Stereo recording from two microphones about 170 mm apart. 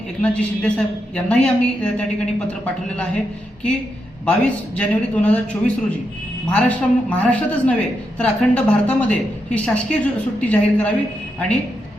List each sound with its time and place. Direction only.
0.2 s a woman's voice: 5° left (ahead or behind)
4.3 s a woman's voice: 10° left (ahead or behind)